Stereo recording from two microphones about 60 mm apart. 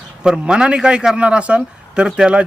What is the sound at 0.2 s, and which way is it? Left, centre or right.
A man's voice, centre.